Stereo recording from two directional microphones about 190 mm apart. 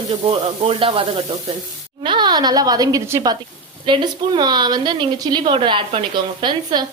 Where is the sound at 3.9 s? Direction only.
25° right (ahead or behind).